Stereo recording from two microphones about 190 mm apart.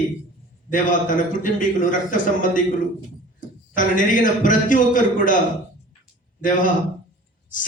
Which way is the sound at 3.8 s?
45° left (ahead or behind).